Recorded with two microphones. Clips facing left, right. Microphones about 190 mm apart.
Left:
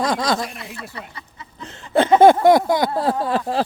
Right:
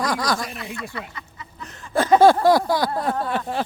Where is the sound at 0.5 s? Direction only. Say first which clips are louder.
Right 3 dB; centre (ahead or behind).